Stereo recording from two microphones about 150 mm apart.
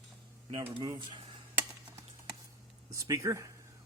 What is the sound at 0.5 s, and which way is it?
Speech, 35° right (ahead or behind).